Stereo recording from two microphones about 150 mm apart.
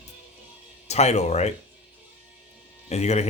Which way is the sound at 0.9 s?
45° left (ahead or behind).